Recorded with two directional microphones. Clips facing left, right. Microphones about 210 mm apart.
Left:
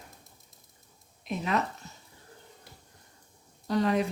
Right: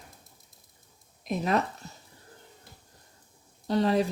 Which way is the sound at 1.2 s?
40° right (ahead or behind).